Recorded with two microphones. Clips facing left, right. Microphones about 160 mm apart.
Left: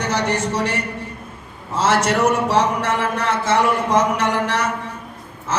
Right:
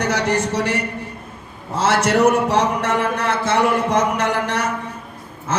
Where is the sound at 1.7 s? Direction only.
60° right (ahead or behind).